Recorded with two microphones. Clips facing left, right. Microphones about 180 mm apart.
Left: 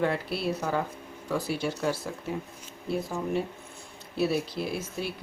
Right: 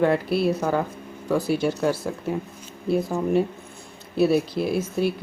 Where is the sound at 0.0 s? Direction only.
50° right (ahead or behind).